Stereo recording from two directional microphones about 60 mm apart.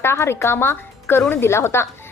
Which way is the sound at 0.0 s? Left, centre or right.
Left.